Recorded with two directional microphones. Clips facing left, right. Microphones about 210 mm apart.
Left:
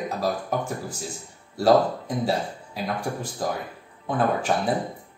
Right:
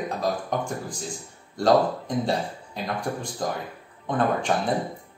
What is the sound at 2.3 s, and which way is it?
A man's voice, 5° left (ahead or behind).